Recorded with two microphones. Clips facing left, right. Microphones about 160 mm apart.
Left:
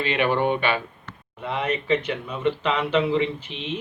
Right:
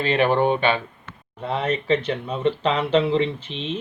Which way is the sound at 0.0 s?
35° right (ahead or behind).